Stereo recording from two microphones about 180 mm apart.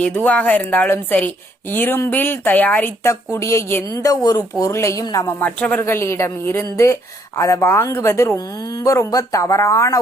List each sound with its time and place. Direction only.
0.0 s speech: 10° left (ahead or behind)
5.5 s speech: 5° left (ahead or behind)